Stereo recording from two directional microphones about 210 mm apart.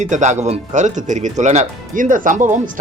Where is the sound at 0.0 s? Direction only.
35° right (ahead or behind).